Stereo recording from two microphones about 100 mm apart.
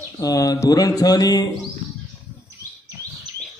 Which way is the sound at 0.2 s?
35° left (ahead or behind).